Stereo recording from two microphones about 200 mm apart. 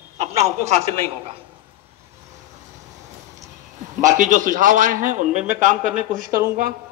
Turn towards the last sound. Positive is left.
turn(degrees=-45)  # may be behind; listen again after turning